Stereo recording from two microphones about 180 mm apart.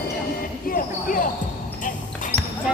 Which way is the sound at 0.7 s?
50° left (ahead or behind).